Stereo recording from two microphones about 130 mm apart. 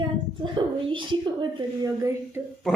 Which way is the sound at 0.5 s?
40° right (ahead or behind).